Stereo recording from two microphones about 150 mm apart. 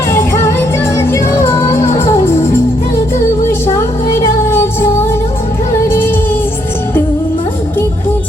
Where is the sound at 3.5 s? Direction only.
20° left (ahead or behind).